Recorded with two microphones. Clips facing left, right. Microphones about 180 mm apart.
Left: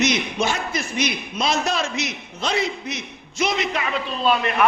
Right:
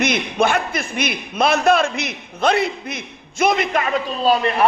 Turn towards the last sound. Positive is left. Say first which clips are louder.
# right 3 dB
turn(degrees=-35)  # may be behind; listen again after turning